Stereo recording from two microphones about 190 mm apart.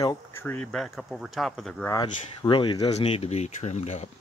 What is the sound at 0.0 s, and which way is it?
Speech, 15° left (ahead or behind).